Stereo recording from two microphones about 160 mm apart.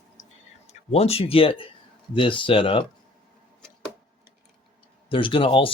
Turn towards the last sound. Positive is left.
turn(degrees=35)  # may be behind; listen again after turning